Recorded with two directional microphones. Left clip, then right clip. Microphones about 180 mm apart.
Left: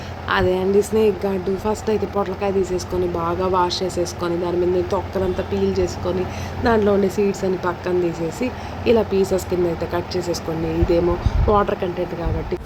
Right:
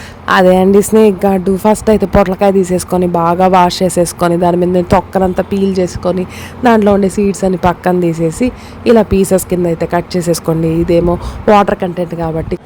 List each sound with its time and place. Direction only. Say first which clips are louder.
0.3 s speech: right 11 dB; 60° right (ahead or behind)